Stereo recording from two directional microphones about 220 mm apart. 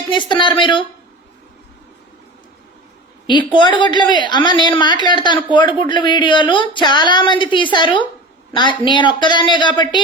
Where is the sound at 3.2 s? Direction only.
20° left (ahead or behind).